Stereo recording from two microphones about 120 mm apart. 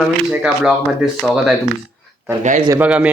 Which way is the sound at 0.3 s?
5° right (ahead or behind).